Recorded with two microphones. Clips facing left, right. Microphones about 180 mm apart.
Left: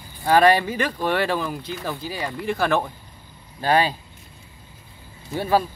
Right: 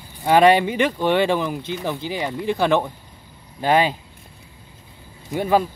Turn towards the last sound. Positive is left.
turn(degrees=-15)  # may be behind; listen again after turning